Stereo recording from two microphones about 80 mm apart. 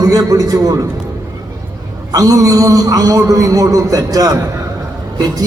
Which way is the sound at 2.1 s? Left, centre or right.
Right.